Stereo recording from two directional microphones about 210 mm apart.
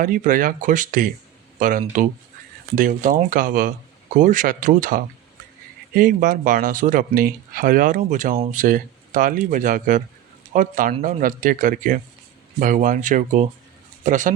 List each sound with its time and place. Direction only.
0.0 s speech: 40° right (ahead or behind)